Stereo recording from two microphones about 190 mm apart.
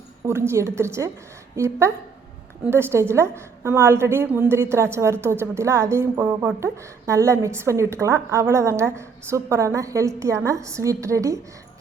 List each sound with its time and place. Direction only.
0.3 s a woman's voice: 15° right (ahead or behind)